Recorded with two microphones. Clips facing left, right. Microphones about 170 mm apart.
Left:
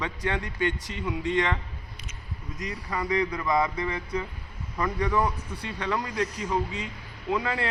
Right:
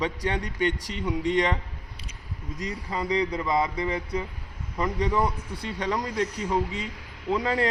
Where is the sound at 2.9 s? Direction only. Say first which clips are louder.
Right 1 dB; 25° right (ahead or behind).